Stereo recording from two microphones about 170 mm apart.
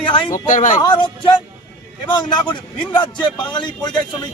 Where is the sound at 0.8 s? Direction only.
25° left (ahead or behind).